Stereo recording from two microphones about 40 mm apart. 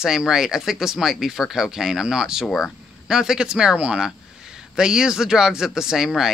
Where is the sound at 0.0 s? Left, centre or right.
Centre.